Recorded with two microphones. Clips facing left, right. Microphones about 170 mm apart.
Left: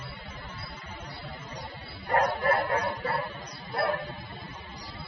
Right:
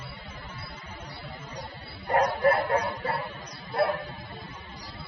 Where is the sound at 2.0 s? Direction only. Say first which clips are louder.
Right 3 dB; 35° right (ahead or behind).